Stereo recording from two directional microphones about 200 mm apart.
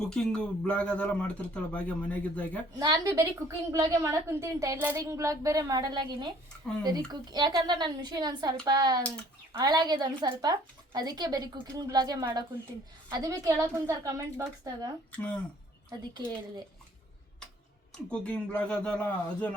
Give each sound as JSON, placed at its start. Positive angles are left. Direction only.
{"t": 0.1, "sound": "a man's voice", "side_deg": 5}
{"t": 2.7, "sound": "a woman's voice", "side_deg": -20}
{"t": 15.1, "sound": "a man's voice", "side_deg": 5}
{"t": 15.9, "sound": "a woman's voice", "side_deg": -20}
{"t": 18.1, "sound": "a man's voice", "side_deg": 5}